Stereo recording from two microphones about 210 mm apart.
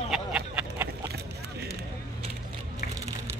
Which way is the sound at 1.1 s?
50° right (ahead or behind).